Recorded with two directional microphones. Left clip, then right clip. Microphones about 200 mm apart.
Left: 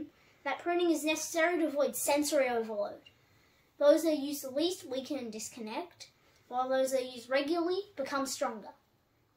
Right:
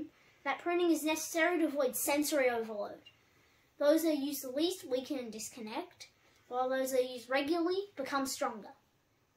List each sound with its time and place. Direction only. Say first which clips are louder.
0.4 s a woman's voice: left 1 dB; 15° right (ahead or behind)